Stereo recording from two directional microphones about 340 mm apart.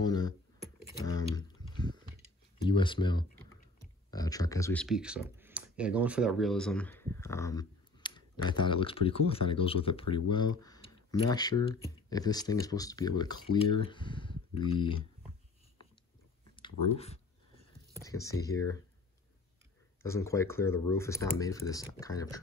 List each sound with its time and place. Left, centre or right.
0.0 s computer keyboard: centre
1.0 s a sound: centre
2.6 s speech: centre
10.0 s speech: left
10.6 s speech: centre
16.9 s speech: centre
20.0 s speech: centre